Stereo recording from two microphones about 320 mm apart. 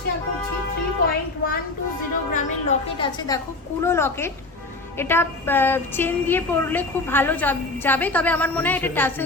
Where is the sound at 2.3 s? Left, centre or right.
Centre.